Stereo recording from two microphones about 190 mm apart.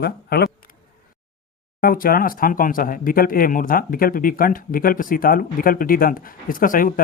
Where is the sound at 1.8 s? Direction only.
50° left (ahead or behind).